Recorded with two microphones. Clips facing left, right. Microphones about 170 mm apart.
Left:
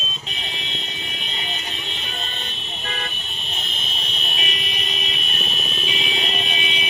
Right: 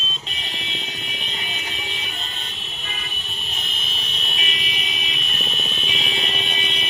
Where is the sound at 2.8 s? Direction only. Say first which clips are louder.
Left 7 dB; 70° left (ahead or behind).